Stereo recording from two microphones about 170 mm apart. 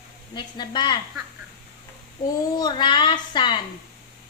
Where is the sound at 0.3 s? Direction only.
25° left (ahead or behind).